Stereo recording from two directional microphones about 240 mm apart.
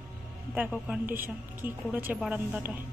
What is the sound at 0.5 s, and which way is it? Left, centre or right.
A woman's voice, centre.